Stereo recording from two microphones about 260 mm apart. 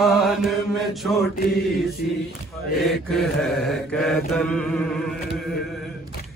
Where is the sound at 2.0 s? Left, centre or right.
Left.